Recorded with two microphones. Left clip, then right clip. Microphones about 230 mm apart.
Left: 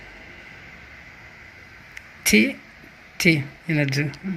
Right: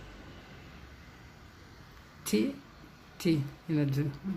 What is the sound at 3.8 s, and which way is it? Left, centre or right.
Speech, left.